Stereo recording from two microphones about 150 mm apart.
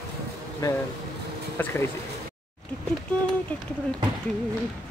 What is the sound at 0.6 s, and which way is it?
Speech, 25° left (ahead or behind).